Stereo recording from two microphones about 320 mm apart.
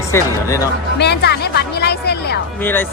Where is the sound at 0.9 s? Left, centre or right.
Left.